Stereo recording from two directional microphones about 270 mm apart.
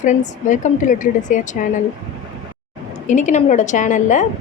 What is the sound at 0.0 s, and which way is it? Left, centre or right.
A woman's voice, left.